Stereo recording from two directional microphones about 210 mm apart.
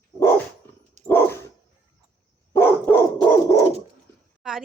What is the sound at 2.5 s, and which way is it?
Dog, 10° left (ahead or behind).